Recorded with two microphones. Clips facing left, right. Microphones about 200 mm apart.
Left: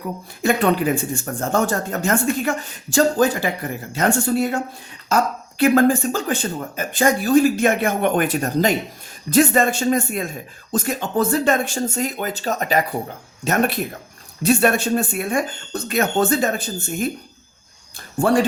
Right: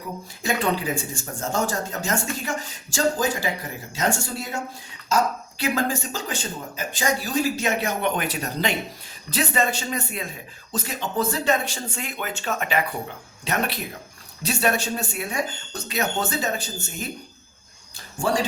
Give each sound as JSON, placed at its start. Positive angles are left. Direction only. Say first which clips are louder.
{"t": 0.4, "sound": "speech", "louder": "left 6 dB", "side_deg": 60}
{"t": 18.2, "sound": "speech", "louder": "left 6 dB", "side_deg": 55}